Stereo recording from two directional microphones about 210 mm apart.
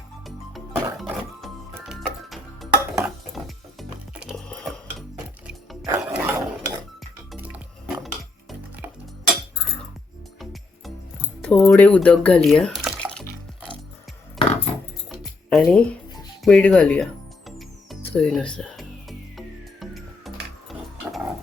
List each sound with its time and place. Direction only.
0.3 s music: centre (ahead or behind)
6.0 s stir: 5° right (ahead or behind)
7.3 s dishes: 10° right (ahead or behind)
11.4 s drip: 10° left (ahead or behind)
13.2 s music: 5° left (ahead or behind)
14.3 s a sound: 30° left (ahead or behind)
15.1 s music: centre (ahead or behind)
16.4 s speech: 5° left (ahead or behind)
18.0 s music: 5° left (ahead or behind)